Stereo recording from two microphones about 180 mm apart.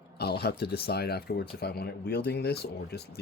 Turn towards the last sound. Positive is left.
turn(degrees=65)  # may be behind; listen again after turning